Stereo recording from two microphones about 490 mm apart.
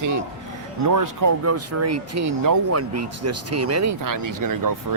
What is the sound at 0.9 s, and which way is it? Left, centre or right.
Speech, right.